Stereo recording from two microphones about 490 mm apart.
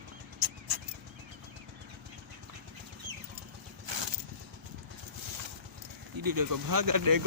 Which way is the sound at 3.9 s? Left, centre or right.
Right.